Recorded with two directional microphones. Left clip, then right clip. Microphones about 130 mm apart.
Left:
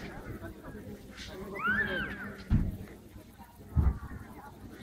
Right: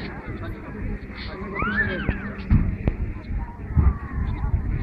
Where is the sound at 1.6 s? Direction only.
55° left (ahead or behind).